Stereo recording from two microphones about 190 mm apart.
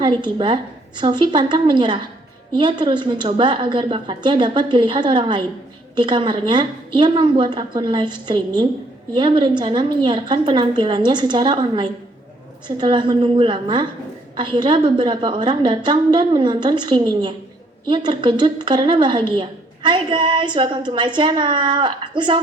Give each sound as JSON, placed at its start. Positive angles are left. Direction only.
{"t": 0.0, "sound": "a woman's voice", "side_deg": -25}